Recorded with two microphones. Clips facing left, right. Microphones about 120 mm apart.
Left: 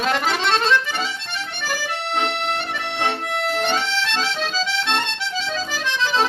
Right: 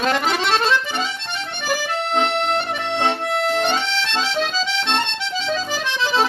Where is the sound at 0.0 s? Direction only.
Centre (ahead or behind).